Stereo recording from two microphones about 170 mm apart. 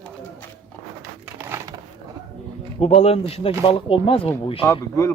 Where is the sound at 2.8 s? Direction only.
35° left (ahead or behind).